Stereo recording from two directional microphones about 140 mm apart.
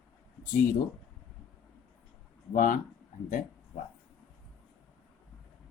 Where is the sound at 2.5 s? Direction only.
70° left (ahead or behind).